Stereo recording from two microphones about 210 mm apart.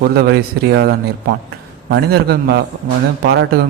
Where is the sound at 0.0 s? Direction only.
50° right (ahead or behind).